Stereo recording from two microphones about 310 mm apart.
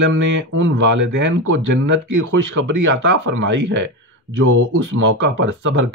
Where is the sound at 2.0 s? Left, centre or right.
Right.